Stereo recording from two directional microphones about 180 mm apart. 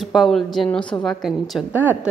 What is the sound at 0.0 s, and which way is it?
A woman's voice, centre (ahead or behind).